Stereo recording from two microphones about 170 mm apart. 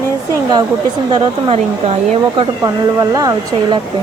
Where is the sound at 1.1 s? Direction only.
30° right (ahead or behind).